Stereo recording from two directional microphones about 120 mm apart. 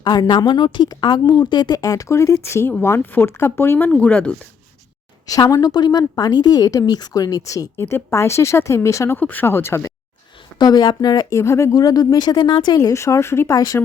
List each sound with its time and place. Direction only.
0.0 s a woman's voice: 40° left (ahead or behind); by 4.4 s 10° left (ahead or behind)
5.2 s a woman's voice: 30° left (ahead or behind)
10.6 s speech: 35° left (ahead or behind)